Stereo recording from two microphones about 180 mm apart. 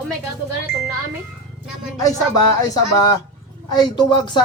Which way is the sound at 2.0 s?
20° left (ahead or behind).